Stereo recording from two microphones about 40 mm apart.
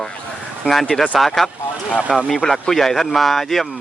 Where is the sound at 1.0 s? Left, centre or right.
Centre.